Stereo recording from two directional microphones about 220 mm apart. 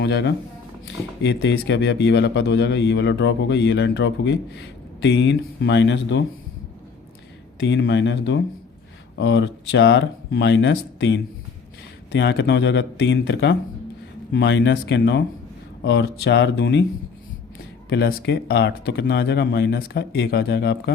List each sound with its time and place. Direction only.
0.0 s a man's voice: 50° left (ahead or behind)
7.6 s a man's voice: 55° left (ahead or behind)
17.8 s a man's voice: 50° left (ahead or behind)